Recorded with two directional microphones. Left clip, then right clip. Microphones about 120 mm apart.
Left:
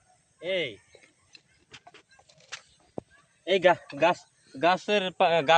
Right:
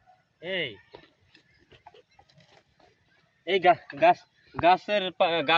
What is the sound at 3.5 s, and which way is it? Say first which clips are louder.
Speech: even; 80° left.